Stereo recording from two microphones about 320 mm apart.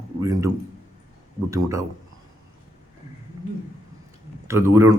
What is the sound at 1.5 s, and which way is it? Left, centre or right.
Speech, centre.